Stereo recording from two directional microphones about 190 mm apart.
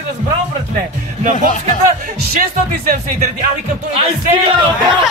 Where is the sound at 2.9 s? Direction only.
45° right (ahead or behind).